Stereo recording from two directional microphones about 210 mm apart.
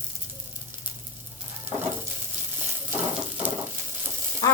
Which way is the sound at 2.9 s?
10° right (ahead or behind).